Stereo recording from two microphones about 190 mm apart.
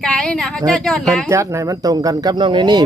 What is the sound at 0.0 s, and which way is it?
Speech, 5° left (ahead or behind).